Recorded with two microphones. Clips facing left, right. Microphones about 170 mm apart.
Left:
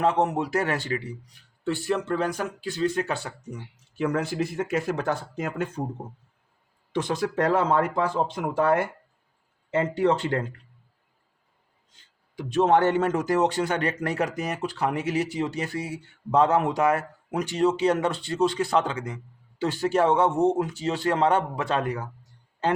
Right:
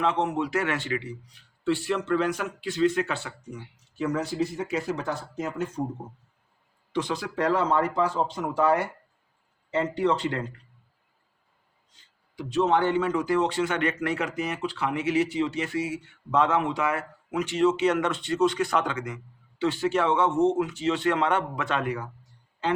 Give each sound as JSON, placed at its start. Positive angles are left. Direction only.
{"t": 0.0, "sound": "a man's voice", "side_deg": 40}
{"t": 4.0, "sound": "speech", "side_deg": 60}
{"t": 6.9, "sound": "speech", "side_deg": 45}
{"t": 12.4, "sound": "a man's voice", "side_deg": 50}